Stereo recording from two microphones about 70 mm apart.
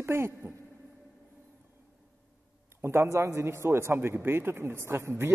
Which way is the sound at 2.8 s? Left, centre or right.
Right.